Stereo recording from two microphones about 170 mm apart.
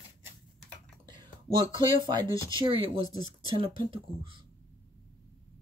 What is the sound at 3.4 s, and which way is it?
Speech, 30° right (ahead or behind).